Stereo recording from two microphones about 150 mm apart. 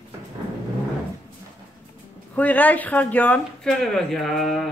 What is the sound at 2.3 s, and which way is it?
Speech, 10° left (ahead or behind).